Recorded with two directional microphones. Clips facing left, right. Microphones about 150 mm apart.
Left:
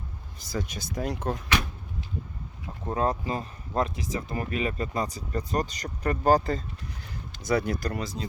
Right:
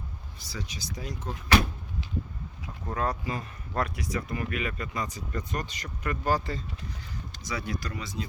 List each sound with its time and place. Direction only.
0.3 s speech: 50° left (ahead or behind); by 1.4 s 65° left (ahead or behind)
2.8 s speech: 25° left (ahead or behind); by 6.6 s 40° left (ahead or behind)
7.4 s speech: 55° left (ahead or behind); by 8.3 s 35° left (ahead or behind)